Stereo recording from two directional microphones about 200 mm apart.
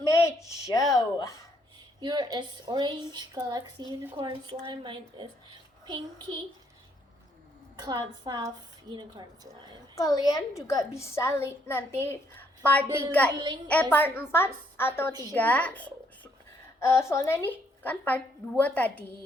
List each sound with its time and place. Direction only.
0.0 s a sound: 15° left (ahead or behind)
2.0 s speech: 20° right (ahead or behind)
7.8 s speech: 20° right (ahead or behind)
9.9 s a woman's voice: 20° left (ahead or behind)